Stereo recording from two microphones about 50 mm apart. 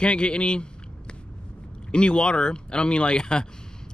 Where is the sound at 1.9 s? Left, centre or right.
Left.